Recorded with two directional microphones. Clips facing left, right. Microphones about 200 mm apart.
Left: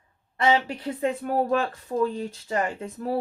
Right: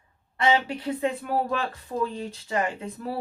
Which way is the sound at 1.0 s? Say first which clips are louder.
Left 4 dB; 45° left (ahead or behind).